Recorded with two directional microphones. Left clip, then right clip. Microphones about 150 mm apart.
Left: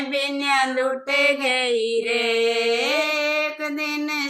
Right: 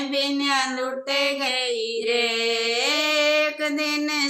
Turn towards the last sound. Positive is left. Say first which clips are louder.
# right 1 dB
turn(degrees=0)  # may be behind; listen again after turning